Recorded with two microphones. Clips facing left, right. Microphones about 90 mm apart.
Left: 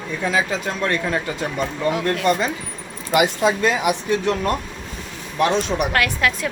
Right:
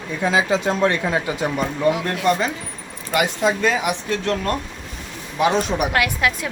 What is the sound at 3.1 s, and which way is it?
Speech, 5° left (ahead or behind).